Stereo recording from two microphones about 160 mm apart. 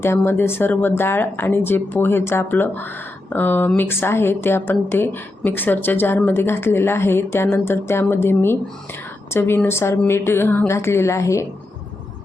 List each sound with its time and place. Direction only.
0.0 s speech: 15° left (ahead or behind)